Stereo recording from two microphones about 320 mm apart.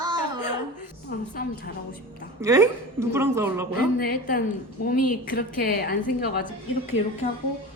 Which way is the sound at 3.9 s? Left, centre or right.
Left.